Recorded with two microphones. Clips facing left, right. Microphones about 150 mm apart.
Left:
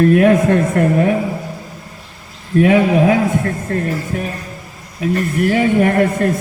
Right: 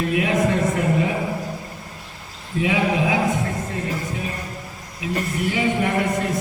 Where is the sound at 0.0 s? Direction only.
55° left (ahead or behind).